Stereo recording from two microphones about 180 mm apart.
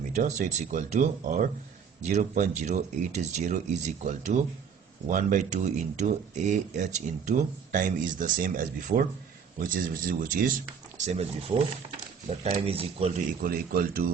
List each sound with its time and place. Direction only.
0.1 s speech: 40° right (ahead or behind)
10.9 s speech: 40° right (ahead or behind)
12.5 s speech: 30° right (ahead or behind)
13.4 s speech: 55° right (ahead or behind)